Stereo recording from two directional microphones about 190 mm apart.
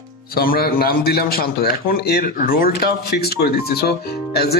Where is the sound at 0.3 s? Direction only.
50° left (ahead or behind).